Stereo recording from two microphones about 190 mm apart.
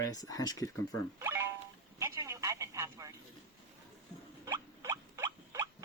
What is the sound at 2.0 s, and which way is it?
Telephone, 15° right (ahead or behind).